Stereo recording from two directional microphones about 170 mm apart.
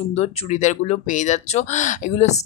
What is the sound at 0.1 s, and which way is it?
A woman's voice, 40° left (ahead or behind).